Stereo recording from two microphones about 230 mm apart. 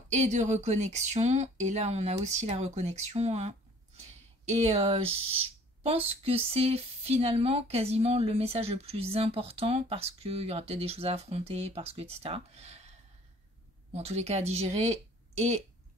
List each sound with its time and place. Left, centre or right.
0.1 s speech: right
13.9 s speech: right